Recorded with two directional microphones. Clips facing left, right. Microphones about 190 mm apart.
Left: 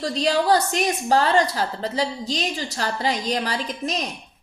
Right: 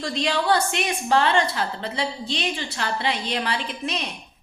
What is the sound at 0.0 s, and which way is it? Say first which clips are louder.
A woman's voice: left 3 dB; 40° left (ahead or behind).